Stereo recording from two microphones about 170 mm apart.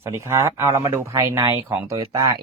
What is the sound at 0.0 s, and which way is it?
Speech, 15° right (ahead or behind).